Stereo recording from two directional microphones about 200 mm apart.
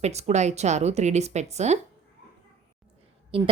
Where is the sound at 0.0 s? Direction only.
35° right (ahead or behind).